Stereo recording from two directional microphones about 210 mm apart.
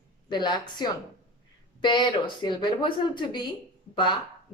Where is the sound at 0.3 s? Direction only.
20° left (ahead or behind).